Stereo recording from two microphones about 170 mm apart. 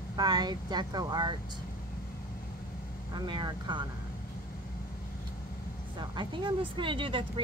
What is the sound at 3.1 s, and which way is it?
Speech, 25° right (ahead or behind).